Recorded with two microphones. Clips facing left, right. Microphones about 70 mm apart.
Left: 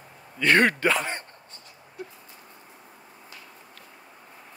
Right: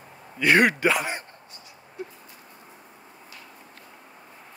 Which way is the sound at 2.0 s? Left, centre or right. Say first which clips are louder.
Right 2 dB; right.